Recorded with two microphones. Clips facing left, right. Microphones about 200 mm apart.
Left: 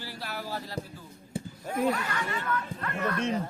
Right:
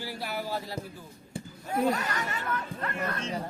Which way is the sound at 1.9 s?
40° right (ahead or behind).